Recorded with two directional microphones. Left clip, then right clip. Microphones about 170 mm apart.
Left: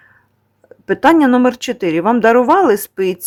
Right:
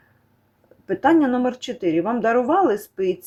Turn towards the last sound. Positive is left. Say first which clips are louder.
# left 7 dB
turn(degrees=25)  # may be behind; listen again after turning